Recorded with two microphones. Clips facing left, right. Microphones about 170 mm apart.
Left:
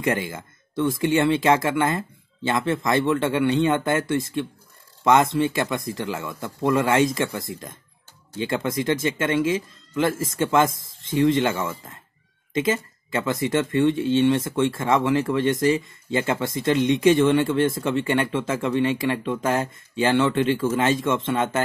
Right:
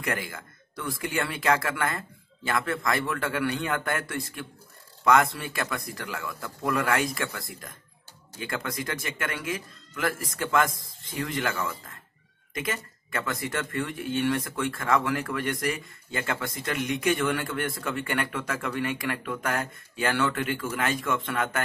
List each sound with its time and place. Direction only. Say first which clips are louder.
0.0 s speech: left 7 dB; 25° left (ahead or behind)